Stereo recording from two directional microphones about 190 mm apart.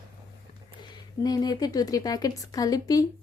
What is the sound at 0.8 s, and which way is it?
A woman's voice, 20° left (ahead or behind).